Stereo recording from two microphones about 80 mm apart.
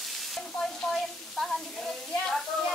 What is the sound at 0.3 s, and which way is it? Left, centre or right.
Frying, centre.